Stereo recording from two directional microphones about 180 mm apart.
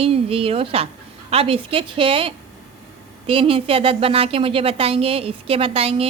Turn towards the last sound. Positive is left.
turn(degrees=-30)  # may be behind; listen again after turning